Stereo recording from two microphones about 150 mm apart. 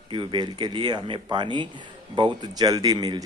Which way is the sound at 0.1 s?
35° right (ahead or behind).